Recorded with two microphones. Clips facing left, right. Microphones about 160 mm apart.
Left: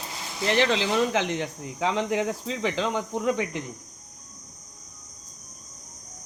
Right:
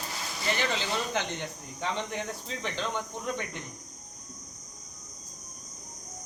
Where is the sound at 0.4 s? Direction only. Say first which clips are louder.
Left 8 dB; 90° left.